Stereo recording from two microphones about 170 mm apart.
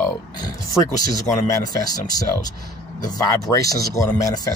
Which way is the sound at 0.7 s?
20° left (ahead or behind).